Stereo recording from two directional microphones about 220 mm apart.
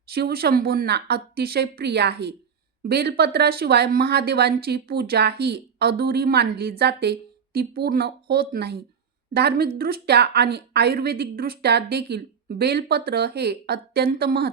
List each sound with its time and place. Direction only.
0.1 s speech: 45° right (ahead or behind)